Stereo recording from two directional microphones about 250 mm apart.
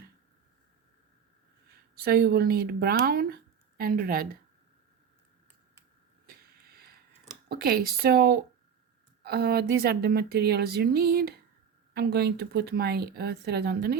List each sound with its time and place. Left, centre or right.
2.0 s speech: right
7.4 s speech: right